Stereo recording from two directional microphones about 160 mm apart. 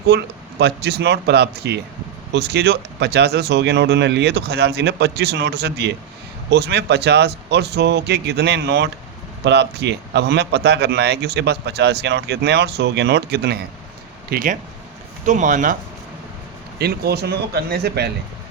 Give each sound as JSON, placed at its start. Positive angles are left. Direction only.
{"t": 0.1, "sound": "a man's voice", "side_deg": -90}
{"t": 14.3, "sound": "speech", "side_deg": -55}
{"t": 16.7, "sound": "a man's voice", "side_deg": -85}